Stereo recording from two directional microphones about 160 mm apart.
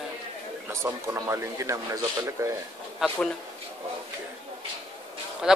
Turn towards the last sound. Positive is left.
turn(degrees=-5)  # may be behind; listen again after turning